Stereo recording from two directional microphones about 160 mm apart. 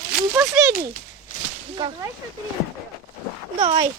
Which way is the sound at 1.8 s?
25° right (ahead or behind).